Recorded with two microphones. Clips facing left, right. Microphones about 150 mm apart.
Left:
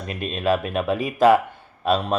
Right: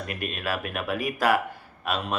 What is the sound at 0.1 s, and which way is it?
Speech, 25° left (ahead or behind).